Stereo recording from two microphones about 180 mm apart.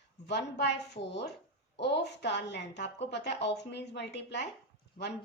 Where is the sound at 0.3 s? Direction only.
70° left (ahead or behind).